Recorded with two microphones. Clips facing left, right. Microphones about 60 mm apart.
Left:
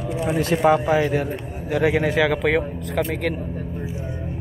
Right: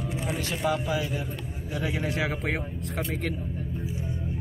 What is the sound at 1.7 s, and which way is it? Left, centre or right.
Speech, left.